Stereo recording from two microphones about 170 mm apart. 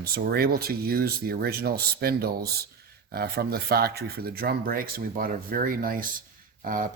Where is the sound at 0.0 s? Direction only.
65° right (ahead or behind).